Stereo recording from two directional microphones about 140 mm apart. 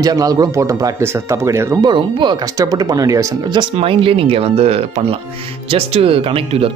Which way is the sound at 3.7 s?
40° right (ahead or behind).